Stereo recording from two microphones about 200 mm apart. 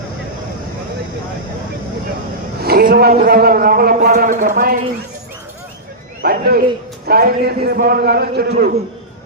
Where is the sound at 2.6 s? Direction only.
50° right (ahead or behind).